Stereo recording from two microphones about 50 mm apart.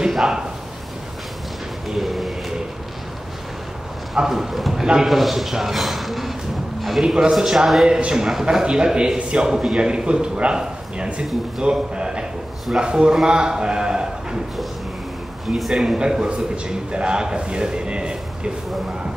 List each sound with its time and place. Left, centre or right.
0.1 s speech: centre
1.9 s a sound: centre
4.1 s a man's voice: centre
15.4 s a man's voice: centre
16.0 s a man's voice: centre